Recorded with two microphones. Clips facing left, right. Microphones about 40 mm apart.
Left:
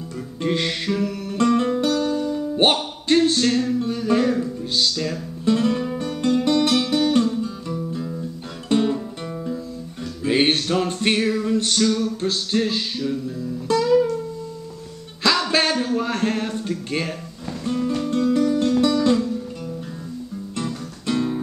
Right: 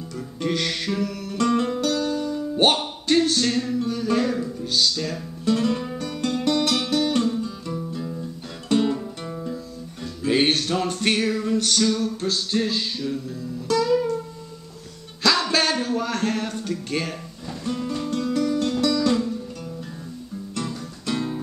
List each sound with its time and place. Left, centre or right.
0.4 s music: left
0.8 s music: centre
4.4 s speech: centre
5.9 s music: centre
15.2 s music: centre
15.8 s a sound: centre
18.3 s music: centre
20.6 s music: centre